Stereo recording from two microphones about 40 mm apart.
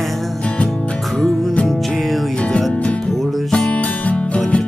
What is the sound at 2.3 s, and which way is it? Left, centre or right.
Music, left.